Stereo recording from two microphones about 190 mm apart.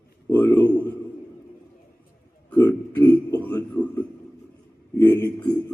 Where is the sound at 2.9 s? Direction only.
10° left (ahead or behind).